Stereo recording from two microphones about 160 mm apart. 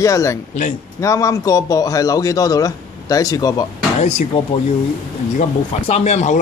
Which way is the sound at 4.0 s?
45° left (ahead or behind).